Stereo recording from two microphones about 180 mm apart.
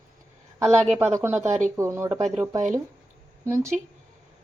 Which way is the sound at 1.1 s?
15° right (ahead or behind).